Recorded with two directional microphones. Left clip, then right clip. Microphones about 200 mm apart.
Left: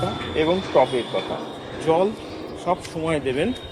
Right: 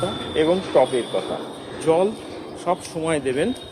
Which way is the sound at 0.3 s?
Centre (ahead or behind).